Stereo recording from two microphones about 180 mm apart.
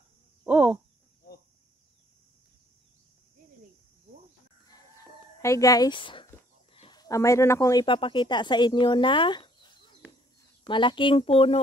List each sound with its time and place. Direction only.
0.4 s a sound: 5° right (ahead or behind)
4.6 s chicken: 20° left (ahead or behind)
6.7 s speech: 25° left (ahead or behind)